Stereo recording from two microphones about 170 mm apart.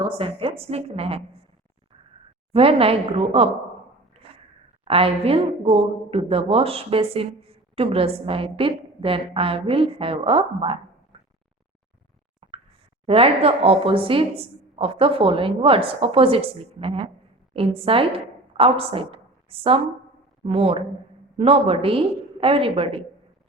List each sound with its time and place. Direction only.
0.0 s a woman's voice: 30° right (ahead or behind)
2.5 s a woman's voice: 35° right (ahead or behind)
4.9 s a woman's voice: 35° right (ahead or behind)
12.4 s a sound: 40° right (ahead or behind)
13.1 s a woman's voice: 35° right (ahead or behind)